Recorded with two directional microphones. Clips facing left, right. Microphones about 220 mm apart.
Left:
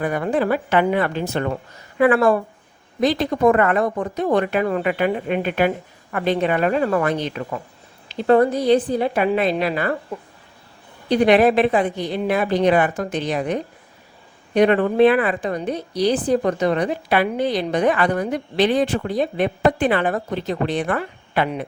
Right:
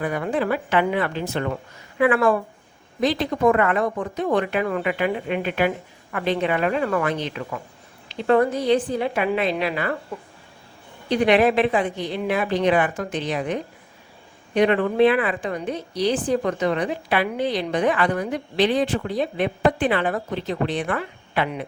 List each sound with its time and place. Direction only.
0.0 s a woman's voice: 45° left (ahead or behind)
11.1 s a woman's voice: 40° left (ahead or behind)